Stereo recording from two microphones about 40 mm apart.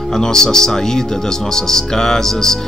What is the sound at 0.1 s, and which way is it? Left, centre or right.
Speech, centre.